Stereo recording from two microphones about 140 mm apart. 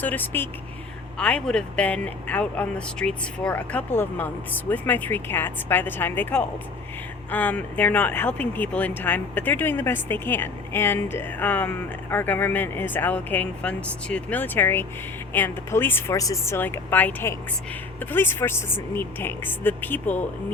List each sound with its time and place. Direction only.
0.0 s speech: 15° left (ahead or behind)